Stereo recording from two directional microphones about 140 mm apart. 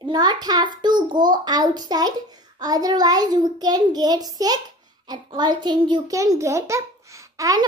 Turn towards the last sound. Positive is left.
turn(degrees=-25)  # may be behind; listen again after turning